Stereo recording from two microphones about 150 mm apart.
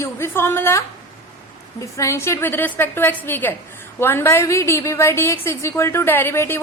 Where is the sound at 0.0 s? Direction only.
15° left (ahead or behind).